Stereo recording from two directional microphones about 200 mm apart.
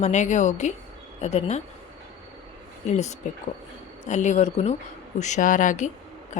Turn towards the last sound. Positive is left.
turn(degrees=40)  # may be behind; listen again after turning